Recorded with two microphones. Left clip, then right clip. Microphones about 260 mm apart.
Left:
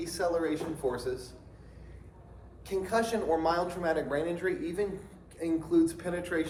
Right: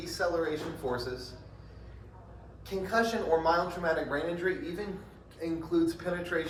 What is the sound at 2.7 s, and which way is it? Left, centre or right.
Speech, left.